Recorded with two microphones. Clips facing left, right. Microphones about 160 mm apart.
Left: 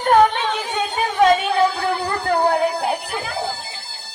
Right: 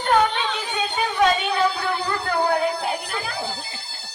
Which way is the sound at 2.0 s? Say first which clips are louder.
Left 3 dB; 45° left (ahead or behind).